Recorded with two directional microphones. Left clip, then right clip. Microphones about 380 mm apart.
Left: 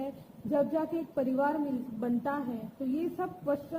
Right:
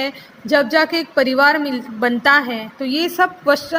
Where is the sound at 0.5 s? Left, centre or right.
Right.